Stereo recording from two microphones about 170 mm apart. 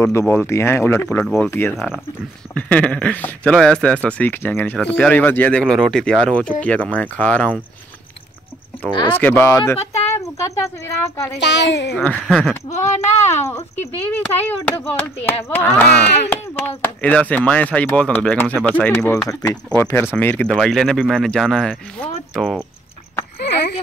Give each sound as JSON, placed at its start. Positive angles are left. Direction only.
{"t": 0.0, "sound": "speech", "side_deg": 15}
{"t": 1.2, "sound": "speech", "side_deg": 0}
{"t": 9.1, "sound": "speech", "side_deg": 10}
{"t": 11.3, "sound": "a woman's voice", "side_deg": 90}
{"t": 12.0, "sound": "speech", "side_deg": 5}
{"t": 12.6, "sound": "speech", "side_deg": 40}
{"t": 14.1, "sound": "speech", "side_deg": 10}
{"t": 23.4, "sound": "a sound", "side_deg": 75}